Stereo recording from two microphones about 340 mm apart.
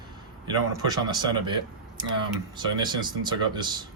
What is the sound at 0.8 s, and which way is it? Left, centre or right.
Speech, centre.